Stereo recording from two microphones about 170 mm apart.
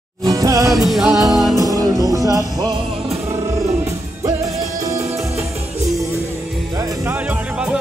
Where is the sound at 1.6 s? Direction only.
20° right (ahead or behind).